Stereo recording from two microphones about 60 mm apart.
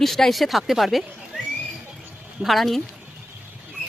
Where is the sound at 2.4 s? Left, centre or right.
Centre.